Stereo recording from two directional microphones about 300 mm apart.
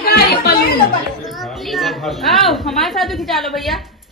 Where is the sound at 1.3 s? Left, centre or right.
Centre.